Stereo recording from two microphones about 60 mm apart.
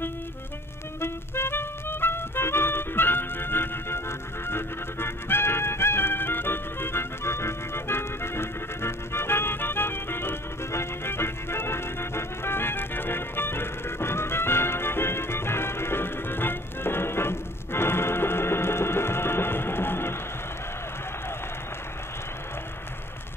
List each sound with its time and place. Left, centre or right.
1.0 s music: left